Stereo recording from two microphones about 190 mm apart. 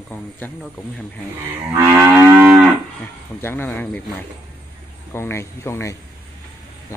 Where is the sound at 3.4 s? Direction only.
10° left (ahead or behind).